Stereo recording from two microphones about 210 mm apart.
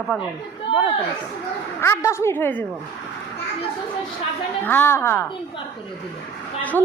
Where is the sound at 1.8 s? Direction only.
15° left (ahead or behind).